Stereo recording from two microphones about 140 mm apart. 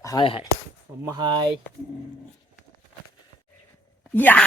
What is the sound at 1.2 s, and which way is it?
Speech, 30° right (ahead or behind).